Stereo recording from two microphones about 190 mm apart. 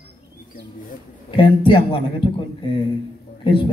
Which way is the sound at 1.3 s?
25° left (ahead or behind).